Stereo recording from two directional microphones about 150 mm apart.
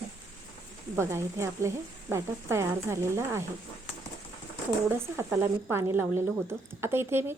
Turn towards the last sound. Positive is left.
turn(degrees=-15)  # may be behind; listen again after turning